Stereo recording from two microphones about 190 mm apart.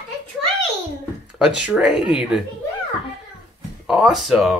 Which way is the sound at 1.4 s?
5° right (ahead or behind).